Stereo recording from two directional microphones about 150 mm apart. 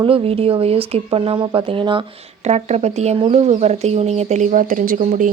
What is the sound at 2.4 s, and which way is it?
Speech, 50° right (ahead or behind).